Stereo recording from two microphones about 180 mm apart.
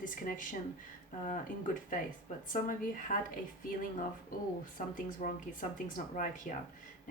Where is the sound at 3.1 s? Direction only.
45° left (ahead or behind).